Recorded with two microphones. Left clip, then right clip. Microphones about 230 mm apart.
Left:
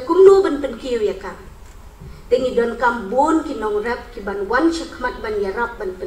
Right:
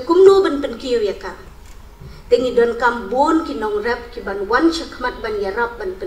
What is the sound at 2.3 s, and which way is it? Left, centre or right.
Speech, right.